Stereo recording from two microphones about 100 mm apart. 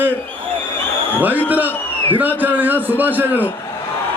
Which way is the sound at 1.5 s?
20° right (ahead or behind).